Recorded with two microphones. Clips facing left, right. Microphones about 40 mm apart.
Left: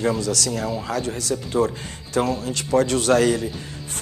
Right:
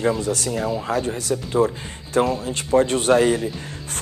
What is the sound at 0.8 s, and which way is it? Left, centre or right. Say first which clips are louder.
A man's voice: right 2 dB; right.